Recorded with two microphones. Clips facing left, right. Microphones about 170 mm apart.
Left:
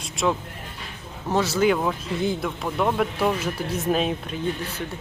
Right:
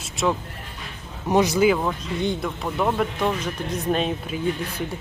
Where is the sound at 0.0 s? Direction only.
Centre (ahead or behind).